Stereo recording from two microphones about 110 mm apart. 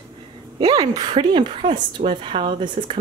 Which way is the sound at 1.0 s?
50° right (ahead or behind).